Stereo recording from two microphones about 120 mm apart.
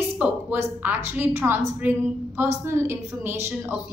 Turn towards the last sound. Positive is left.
turn(degrees=-20)  # may be behind; listen again after turning